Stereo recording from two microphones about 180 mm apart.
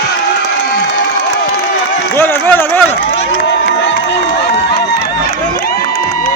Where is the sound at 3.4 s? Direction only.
90° left.